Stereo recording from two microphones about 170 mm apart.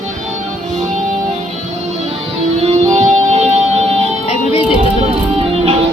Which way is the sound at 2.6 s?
40° right (ahead or behind).